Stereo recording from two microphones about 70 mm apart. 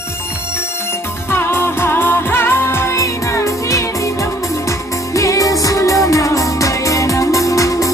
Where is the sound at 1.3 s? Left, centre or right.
Left.